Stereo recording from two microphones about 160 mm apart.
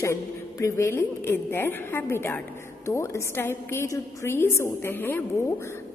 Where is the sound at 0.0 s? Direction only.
20° left (ahead or behind).